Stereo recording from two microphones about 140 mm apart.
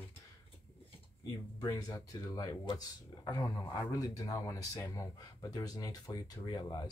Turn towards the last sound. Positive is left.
turn(degrees=30)  # may be behind; listen again after turning